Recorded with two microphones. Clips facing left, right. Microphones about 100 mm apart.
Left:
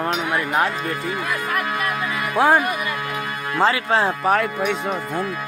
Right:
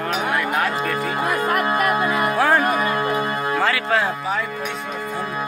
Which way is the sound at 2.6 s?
40° right (ahead or behind).